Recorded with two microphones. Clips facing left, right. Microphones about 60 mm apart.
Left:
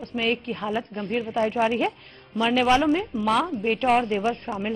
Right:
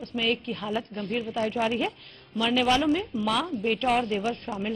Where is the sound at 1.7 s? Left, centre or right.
Centre.